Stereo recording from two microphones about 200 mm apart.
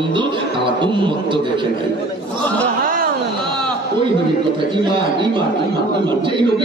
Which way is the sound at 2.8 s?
45° right (ahead or behind).